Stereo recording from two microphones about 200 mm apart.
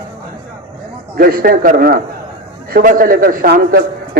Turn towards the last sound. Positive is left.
turn(degrees=-45)  # may be behind; listen again after turning